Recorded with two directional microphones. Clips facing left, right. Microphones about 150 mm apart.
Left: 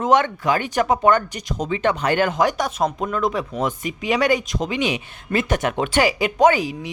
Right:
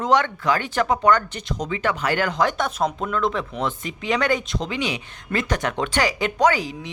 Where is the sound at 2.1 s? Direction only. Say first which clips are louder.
Left 3 dB; 20° left (ahead or behind).